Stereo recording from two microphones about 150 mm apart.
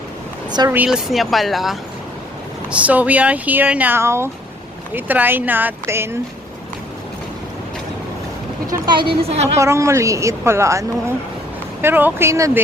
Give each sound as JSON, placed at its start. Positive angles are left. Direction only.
{"t": 0.7, "sound": "speech", "side_deg": -5}
{"t": 8.7, "sound": "a woman's voice", "side_deg": -30}
{"t": 9.6, "sound": "a woman's voice", "side_deg": -20}